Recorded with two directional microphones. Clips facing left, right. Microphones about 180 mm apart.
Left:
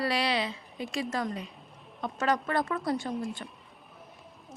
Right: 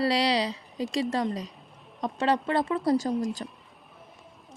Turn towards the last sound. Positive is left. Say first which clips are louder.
# right 6 dB
turn(degrees=-40)  # may be behind; listen again after turning